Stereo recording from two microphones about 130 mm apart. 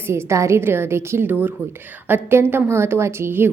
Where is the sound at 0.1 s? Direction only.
20° right (ahead or behind).